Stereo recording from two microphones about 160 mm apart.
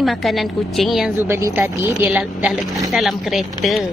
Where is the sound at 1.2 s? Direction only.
20° right (ahead or behind).